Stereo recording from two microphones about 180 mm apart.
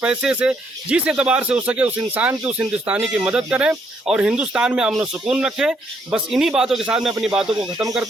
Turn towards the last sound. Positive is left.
turn(degrees=-5)  # may be behind; listen again after turning